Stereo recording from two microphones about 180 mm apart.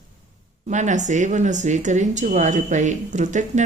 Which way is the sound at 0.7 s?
40° right (ahead or behind).